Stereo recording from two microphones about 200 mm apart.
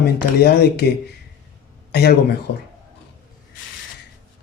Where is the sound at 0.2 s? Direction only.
55° left (ahead or behind).